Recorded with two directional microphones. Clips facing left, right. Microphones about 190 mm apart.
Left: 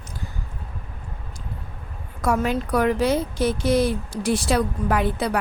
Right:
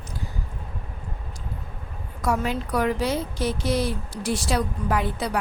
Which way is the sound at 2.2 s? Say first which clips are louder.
Left 3 dB; 50° left (ahead or behind).